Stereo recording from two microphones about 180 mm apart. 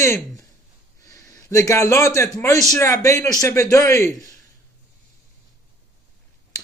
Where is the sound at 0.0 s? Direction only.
15° left (ahead or behind).